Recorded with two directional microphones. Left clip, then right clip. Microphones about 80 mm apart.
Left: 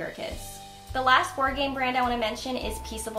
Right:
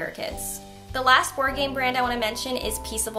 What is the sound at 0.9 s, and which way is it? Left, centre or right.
A woman's voice, centre.